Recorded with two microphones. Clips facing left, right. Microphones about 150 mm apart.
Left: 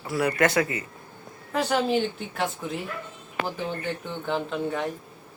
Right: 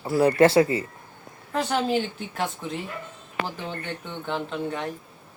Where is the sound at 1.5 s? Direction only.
Centre (ahead or behind).